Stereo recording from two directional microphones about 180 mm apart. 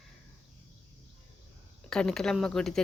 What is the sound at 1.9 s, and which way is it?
Speech, 5° left (ahead or behind).